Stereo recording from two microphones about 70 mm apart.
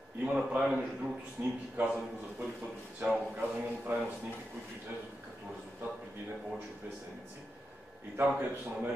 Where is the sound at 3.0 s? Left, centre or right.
Right.